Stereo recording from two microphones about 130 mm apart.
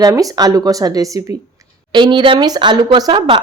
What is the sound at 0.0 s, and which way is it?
A woman's voice, 30° right (ahead or behind).